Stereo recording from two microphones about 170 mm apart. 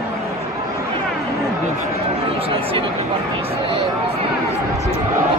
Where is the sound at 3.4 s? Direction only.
35° right (ahead or behind).